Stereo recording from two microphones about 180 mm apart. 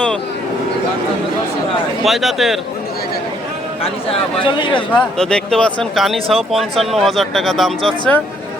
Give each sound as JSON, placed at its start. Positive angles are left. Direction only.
{"t": 2.0, "sound": "speech", "side_deg": 0}
{"t": 4.4, "sound": "a man's voice", "side_deg": 25}
{"t": 4.9, "sound": "speech", "side_deg": 5}